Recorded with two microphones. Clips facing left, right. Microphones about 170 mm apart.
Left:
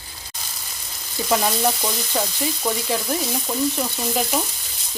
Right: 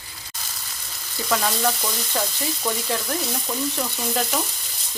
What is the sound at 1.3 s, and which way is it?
Frying, 20° left (ahead or behind).